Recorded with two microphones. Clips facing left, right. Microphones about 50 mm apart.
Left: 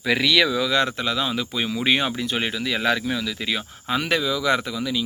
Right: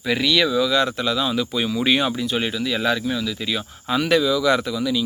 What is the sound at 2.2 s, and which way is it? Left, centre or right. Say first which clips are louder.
Speech: right 2 dB; left.